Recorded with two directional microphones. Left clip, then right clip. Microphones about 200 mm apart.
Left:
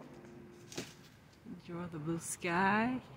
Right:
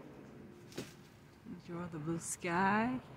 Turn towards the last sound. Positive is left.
turn(degrees=10)  # may be behind; listen again after turning